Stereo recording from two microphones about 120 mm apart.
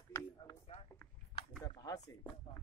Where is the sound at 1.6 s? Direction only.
30° left (ahead or behind).